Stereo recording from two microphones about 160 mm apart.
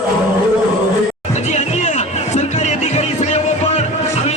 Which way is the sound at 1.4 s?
45° left (ahead or behind).